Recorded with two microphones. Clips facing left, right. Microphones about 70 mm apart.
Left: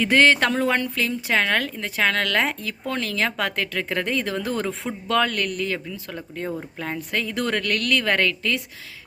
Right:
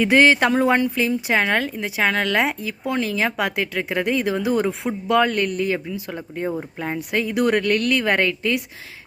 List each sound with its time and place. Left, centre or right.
0.0 s speech: centre